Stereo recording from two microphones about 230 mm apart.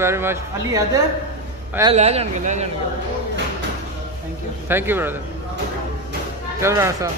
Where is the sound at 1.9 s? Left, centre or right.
Right.